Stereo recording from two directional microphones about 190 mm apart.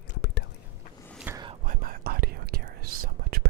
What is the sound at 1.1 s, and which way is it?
Whispering, 10° right (ahead or behind).